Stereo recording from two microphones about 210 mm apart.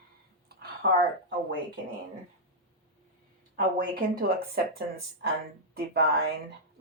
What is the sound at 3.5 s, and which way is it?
A woman's voice, 40° right (ahead or behind).